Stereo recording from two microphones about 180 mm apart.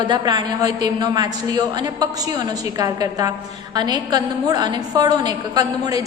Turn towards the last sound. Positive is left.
turn(degrees=-20)  # may be behind; listen again after turning